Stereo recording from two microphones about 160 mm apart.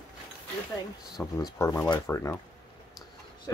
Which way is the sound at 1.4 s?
20° left (ahead or behind).